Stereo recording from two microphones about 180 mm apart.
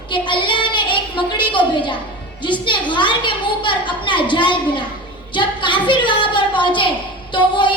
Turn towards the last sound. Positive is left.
turn(degrees=25)  # may be behind; listen again after turning